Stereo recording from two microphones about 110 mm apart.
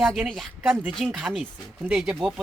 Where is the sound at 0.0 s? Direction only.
Centre (ahead or behind).